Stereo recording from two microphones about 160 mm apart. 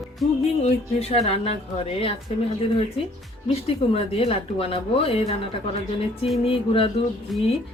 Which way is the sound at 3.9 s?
35° left (ahead or behind).